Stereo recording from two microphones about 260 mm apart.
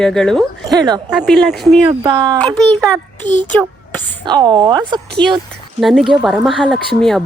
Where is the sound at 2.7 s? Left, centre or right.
Centre.